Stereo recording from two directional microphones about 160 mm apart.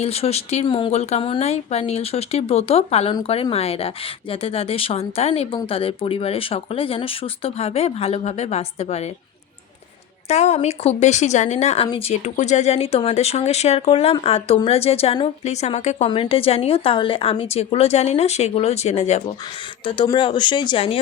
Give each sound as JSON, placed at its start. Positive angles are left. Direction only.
{"t": 0.0, "sound": "speech", "side_deg": 40}
{"t": 10.2, "sound": "a woman's voice", "side_deg": 40}
{"t": 20.1, "sound": "speech", "side_deg": 30}